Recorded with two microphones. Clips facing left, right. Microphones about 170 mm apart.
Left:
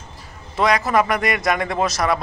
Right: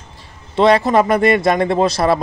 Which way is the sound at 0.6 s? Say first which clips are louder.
Right 6 dB; 30° right (ahead or behind).